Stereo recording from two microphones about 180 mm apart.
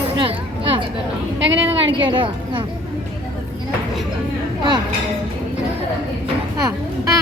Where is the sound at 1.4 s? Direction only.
90° right.